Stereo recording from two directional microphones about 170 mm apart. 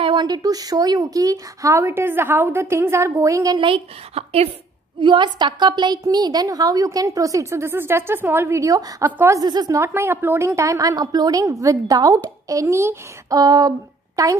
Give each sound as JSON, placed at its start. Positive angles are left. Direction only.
{"t": 0.0, "sound": "a woman's voice", "side_deg": -25}